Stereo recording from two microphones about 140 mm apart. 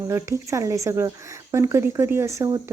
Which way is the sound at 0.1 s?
20° right (ahead or behind).